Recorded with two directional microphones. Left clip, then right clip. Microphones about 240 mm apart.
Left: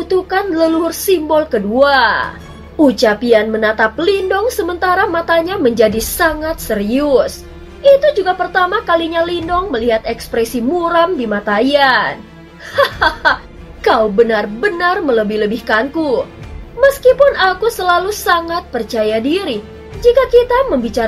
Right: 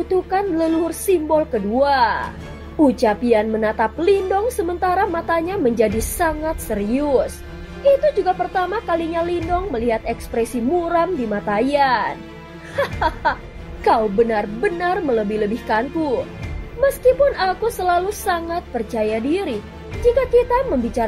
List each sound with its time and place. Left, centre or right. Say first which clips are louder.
0.1 s a woman's voice: left 5 dB; right
16.8 s a woman's voice: left 6 dB; right